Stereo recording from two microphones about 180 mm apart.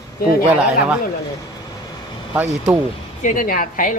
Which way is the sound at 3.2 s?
50° left (ahead or behind).